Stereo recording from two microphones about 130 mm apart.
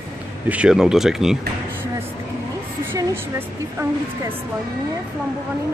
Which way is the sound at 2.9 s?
20° right (ahead or behind).